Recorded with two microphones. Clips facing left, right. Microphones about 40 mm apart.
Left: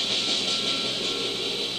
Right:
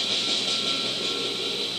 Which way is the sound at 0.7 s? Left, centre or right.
Right.